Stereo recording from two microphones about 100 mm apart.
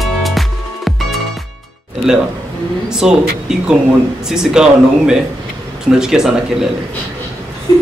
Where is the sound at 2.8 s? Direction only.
5° right (ahead or behind).